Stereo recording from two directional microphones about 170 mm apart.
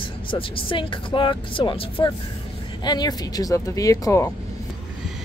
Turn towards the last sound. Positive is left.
turn(degrees=20)  # may be behind; listen again after turning